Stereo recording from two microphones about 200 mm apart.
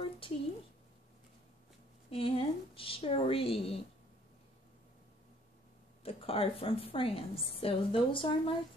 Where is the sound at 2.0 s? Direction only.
25° left (ahead or behind).